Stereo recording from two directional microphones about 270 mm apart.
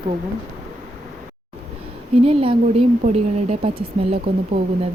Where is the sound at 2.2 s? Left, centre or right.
Right.